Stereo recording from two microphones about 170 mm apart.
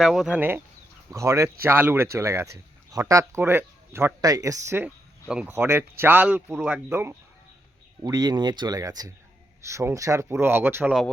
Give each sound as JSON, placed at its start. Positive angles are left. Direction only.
{"t": 0.0, "sound": "speech", "side_deg": 0}